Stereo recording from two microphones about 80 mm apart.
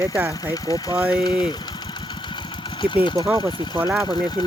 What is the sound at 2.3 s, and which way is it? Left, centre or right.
Engine, left.